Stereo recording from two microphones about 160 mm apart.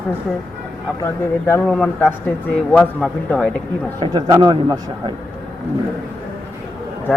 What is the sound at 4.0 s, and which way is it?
Speech, 25° right (ahead or behind).